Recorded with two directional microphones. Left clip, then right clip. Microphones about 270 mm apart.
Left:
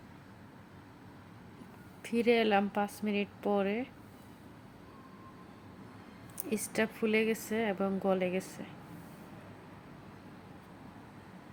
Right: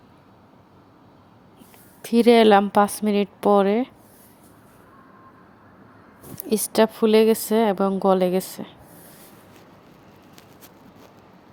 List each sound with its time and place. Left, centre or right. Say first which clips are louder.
2.0 s a woman's voice: right 13 dB; right
6.5 s a woman's voice: right 14 dB; right